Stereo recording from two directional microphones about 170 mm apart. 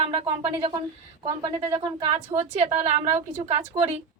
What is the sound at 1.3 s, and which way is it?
A woman's voice, 20° right (ahead or behind).